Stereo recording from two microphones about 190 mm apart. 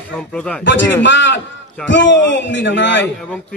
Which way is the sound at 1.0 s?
70° left (ahead or behind).